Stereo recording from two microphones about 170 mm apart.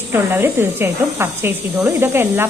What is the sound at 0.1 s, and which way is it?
Speech, 15° right (ahead or behind).